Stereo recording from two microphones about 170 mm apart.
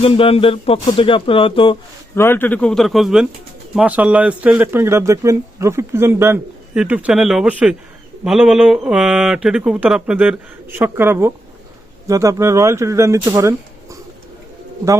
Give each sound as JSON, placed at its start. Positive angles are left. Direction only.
{"t": 0.0, "sound": "speech", "side_deg": 35}
{"t": 2.1, "sound": "speech", "side_deg": 15}